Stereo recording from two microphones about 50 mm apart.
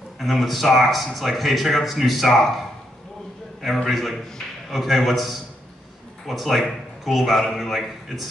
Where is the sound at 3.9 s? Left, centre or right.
Centre.